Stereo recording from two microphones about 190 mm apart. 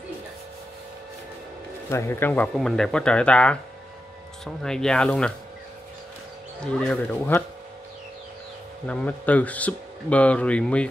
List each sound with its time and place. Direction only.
1.9 s speech: 15° left (ahead or behind)
6.6 s speech: 5° left (ahead or behind)
8.8 s speech: 5° left (ahead or behind)